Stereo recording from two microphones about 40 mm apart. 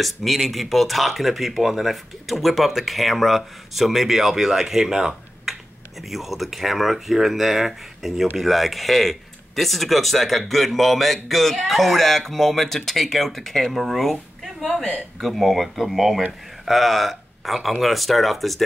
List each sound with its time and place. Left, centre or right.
0.0 s speech: centre
14.4 s a sound: centre
14.8 s speech: left
15.1 s speech: centre